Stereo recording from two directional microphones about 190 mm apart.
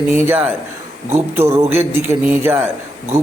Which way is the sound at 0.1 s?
10° right (ahead or behind).